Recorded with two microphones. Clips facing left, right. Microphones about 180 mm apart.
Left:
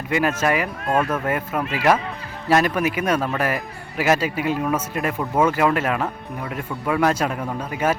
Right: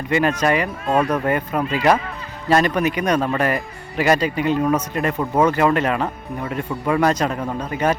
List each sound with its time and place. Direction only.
0.1 s speech: 5° left (ahead or behind)